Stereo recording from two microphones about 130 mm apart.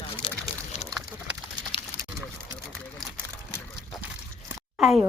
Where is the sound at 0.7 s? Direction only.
60° left (ahead or behind).